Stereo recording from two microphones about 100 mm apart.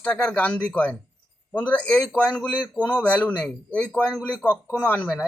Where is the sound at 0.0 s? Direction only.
15° left (ahead or behind).